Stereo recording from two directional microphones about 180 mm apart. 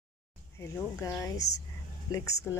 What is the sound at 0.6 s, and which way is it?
Speech, 10° left (ahead or behind).